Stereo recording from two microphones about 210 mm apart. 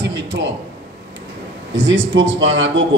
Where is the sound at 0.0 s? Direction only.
55° right (ahead or behind).